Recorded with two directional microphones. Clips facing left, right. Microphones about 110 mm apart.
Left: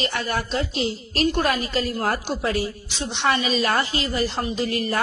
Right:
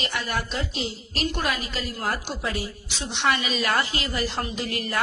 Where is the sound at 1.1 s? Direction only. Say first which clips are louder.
Left 6 dB; 40° left (ahead or behind).